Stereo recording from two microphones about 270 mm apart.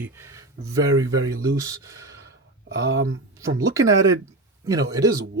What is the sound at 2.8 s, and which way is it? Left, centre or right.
Speech, right.